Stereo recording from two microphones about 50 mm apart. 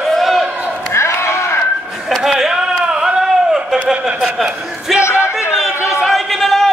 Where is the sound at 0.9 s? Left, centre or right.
Left.